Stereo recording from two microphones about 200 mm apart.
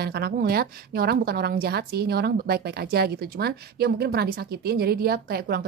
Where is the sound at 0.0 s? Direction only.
50° right (ahead or behind).